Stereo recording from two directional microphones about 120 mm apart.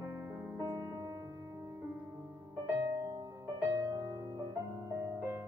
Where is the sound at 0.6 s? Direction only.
35° right (ahead or behind).